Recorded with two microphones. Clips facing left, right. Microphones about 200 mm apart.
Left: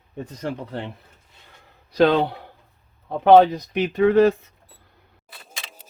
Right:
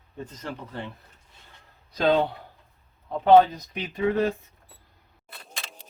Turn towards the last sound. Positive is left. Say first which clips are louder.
# even
turn(degrees=0)  # may be behind; listen again after turning